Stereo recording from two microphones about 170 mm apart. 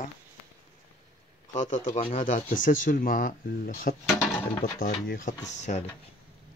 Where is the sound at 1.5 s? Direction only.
45° left (ahead or behind).